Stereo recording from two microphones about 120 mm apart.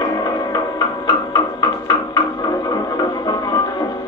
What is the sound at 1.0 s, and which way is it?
Music, 35° left (ahead or behind).